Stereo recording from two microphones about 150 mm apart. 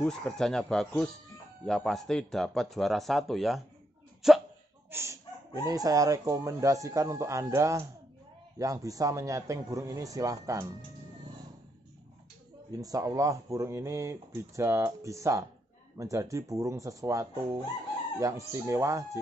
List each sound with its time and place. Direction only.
0.0 s speech: 5° left (ahead or behind)
4.2 s a sound: centre (ahead or behind)
4.9 s speech: 15° right (ahead or behind)
12.7 s speech: 20° right (ahead or behind)